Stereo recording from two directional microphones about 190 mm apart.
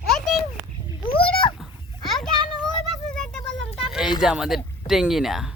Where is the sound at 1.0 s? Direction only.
30° left (ahead or behind).